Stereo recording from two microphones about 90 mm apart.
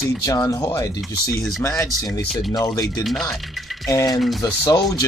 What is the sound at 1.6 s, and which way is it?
Speech, 35° left (ahead or behind).